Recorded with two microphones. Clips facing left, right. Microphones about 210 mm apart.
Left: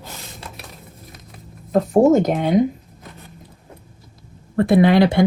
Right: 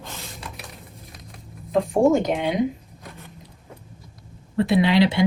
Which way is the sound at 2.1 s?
45° left (ahead or behind).